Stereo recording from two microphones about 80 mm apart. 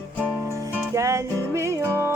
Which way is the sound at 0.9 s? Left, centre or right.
Right.